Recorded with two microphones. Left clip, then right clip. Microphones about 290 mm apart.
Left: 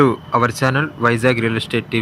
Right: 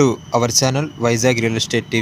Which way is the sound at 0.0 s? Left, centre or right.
Centre.